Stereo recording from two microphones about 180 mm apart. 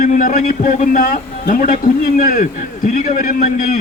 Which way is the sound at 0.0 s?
50° left (ahead or behind).